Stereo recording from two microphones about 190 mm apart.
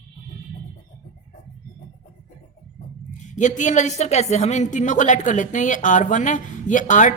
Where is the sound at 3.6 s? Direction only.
40° left (ahead or behind).